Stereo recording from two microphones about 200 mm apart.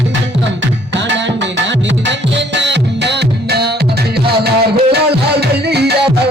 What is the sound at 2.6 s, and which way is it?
Music, 60° right (ahead or behind).